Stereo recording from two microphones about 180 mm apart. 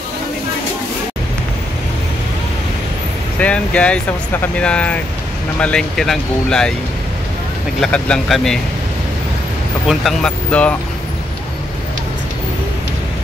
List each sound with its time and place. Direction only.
3.3 s speech: 5° left (ahead or behind)
7.8 s speech: 5° left (ahead or behind)
9.8 s speech: 5° left (ahead or behind)